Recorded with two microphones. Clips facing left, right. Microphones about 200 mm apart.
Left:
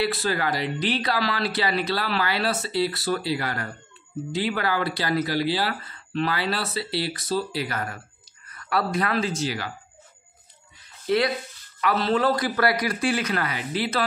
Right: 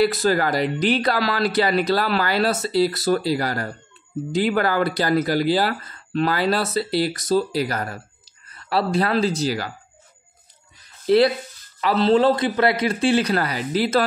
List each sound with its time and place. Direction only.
0.0 s speech: 45° right (ahead or behind)
11.1 s a man's voice: 35° right (ahead or behind)